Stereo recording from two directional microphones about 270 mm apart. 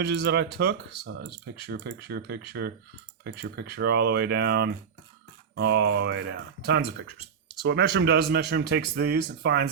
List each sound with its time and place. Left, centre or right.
0.0 s speech: right